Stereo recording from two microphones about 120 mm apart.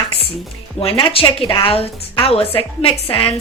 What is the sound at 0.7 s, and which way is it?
A woman's voice, 45° left (ahead or behind).